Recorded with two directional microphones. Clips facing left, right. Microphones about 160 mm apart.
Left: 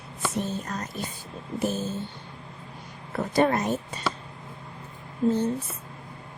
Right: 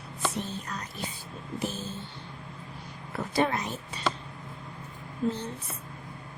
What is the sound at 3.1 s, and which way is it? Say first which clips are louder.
Speech: left 5 dB; 45° left (ahead or behind).